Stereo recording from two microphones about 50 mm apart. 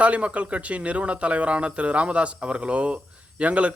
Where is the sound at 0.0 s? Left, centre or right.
Right.